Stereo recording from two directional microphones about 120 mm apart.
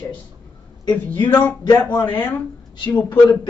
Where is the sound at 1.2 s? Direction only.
10° left (ahead or behind).